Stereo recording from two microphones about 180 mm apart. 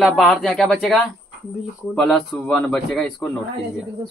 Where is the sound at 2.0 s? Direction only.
Centre (ahead or behind).